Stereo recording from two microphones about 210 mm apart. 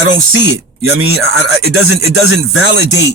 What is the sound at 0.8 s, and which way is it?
Speech, 80° right.